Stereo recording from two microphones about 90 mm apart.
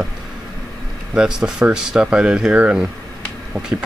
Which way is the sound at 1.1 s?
10° right (ahead or behind).